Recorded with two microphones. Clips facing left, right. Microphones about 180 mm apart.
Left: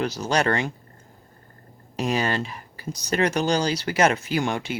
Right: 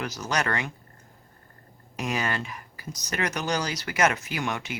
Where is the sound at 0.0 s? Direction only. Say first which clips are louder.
Left 6 dB; 30° left (ahead or behind).